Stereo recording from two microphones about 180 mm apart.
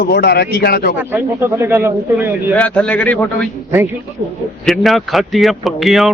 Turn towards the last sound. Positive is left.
turn(degrees=0)  # may be behind; listen again after turning